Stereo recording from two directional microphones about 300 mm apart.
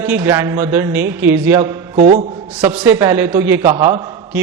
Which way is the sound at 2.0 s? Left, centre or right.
Right.